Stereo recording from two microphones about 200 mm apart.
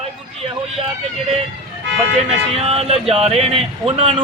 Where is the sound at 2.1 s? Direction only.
30° right (ahead or behind).